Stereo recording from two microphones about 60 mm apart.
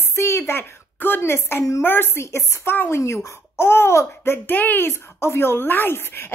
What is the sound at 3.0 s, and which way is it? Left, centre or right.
A woman's voice, left.